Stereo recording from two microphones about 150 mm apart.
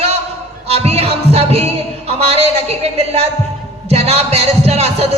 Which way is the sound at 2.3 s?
45° right (ahead or behind).